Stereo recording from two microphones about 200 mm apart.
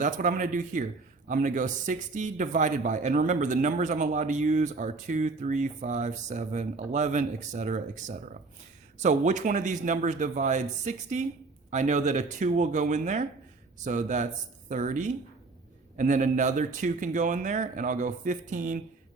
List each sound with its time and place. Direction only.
0.0 s speech: 40° right (ahead or behind)